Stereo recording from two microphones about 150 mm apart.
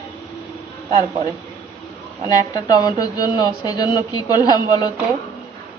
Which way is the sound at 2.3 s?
25° left (ahead or behind).